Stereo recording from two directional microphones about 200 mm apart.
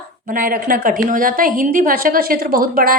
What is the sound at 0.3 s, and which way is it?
A woman's voice, 45° right (ahead or behind).